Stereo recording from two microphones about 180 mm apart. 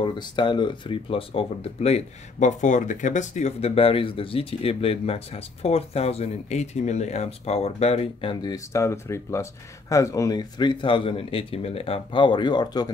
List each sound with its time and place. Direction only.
0.0 s speech: 25° left (ahead or behind)